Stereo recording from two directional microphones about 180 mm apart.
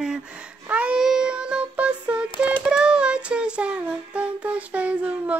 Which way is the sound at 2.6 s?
5° right (ahead or behind).